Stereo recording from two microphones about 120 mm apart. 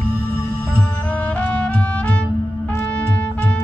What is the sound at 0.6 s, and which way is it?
Music, 15° left (ahead or behind).